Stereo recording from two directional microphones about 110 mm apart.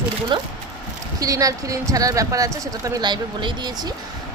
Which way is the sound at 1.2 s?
30° right (ahead or behind).